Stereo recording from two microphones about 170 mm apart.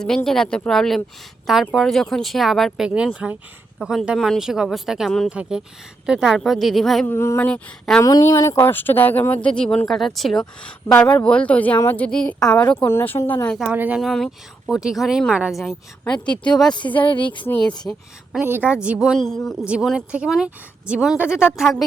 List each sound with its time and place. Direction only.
0.3 s speech: 5° left (ahead or behind)
7.1 s speech: 15° left (ahead or behind)
8.0 s speech: 20° left (ahead or behind)
13.6 s speech: 10° right (ahead or behind)
16.1 s speech: 25° left (ahead or behind)
16.4 s speech: 5° left (ahead or behind)
16.7 s speech: 30° left (ahead or behind)
17.4 s speech: 10° left (ahead or behind)
18.4 s speech: 10° right (ahead or behind)